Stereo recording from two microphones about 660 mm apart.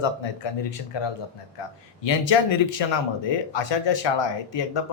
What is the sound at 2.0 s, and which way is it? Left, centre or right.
Speech, left.